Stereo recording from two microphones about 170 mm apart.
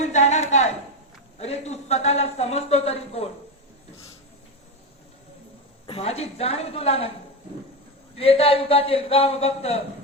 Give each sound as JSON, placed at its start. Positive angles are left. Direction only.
{"t": 0.0, "sound": "a sound", "side_deg": 40}
{"t": 1.4, "sound": "speech", "side_deg": 40}
{"t": 5.8, "sound": "speech", "side_deg": 35}
{"t": 8.1, "sound": "speech", "side_deg": 35}